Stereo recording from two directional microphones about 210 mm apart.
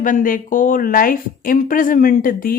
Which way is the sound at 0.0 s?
40° left (ahead or behind).